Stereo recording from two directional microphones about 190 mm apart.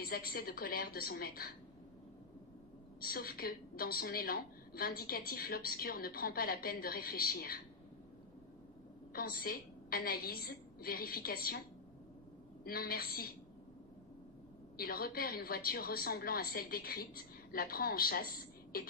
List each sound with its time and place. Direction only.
0.0 s a woman's voice: 50° left (ahead or behind)
3.0 s a woman's voice: 50° left (ahead or behind)
9.1 s a woman's voice: 50° left (ahead or behind)
12.6 s a woman's voice: 50° left (ahead or behind)
14.8 s a woman's voice: 50° left (ahead or behind)